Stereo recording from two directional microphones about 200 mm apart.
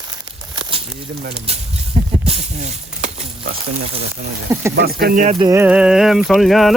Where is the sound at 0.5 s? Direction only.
25° right (ahead or behind).